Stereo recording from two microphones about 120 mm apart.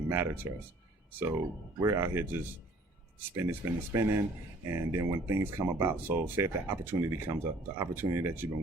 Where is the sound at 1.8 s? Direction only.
25° right (ahead or behind).